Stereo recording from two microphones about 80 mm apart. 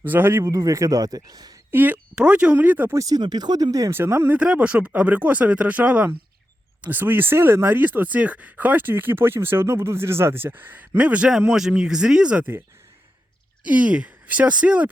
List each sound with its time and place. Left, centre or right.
0.0 s speech: right
0.5 s speech: right
1.7 s speech: right
2.9 s speech: right
3.2 s speech: right
3.9 s speech: right
4.4 s speech: centre
13.7 s speech: centre